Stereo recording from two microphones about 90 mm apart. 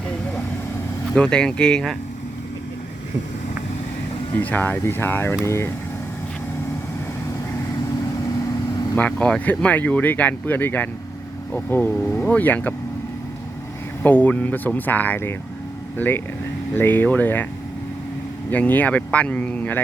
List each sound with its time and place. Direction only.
1.1 s speech: 10° left (ahead or behind)
4.4 s speech: 20° left (ahead or behind)
7.9 s vehicle: 45° left (ahead or behind)
9.0 s speech: 15° left (ahead or behind)
14.0 s speech: 20° left (ahead or behind)
18.5 s speech: 15° left (ahead or behind)